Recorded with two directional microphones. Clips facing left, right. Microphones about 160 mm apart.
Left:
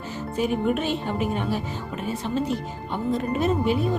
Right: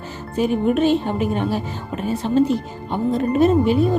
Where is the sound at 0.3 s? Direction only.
30° right (ahead or behind).